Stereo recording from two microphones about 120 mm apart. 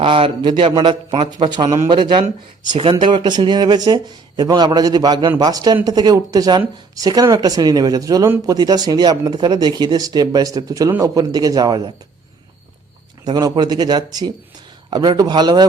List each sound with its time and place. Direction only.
0.0 s a man's voice: 45° right (ahead or behind)
13.2 s speech: 35° right (ahead or behind)